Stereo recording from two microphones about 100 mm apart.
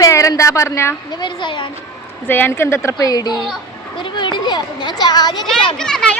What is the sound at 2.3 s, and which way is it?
A woman's voice, 20° left (ahead or behind).